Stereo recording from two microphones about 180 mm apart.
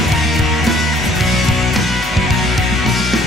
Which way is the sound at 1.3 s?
Centre (ahead or behind).